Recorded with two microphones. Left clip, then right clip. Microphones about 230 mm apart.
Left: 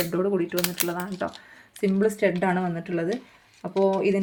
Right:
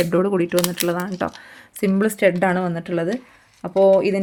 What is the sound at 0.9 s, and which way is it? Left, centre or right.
Speech, right.